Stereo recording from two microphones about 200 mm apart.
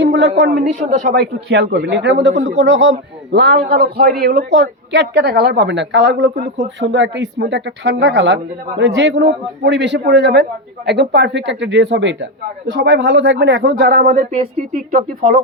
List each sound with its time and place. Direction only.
0.0 s a woman's voice: 65° right (ahead or behind); by 1.1 s 35° right (ahead or behind)
1.1 s a man's voice: 55° right (ahead or behind)
2.3 s speech: 40° right (ahead or behind)
2.6 s a man's voice: 65° right (ahead or behind)
3.3 s a man's voice: 55° right (ahead or behind)
13.9 s speech: 40° right (ahead or behind)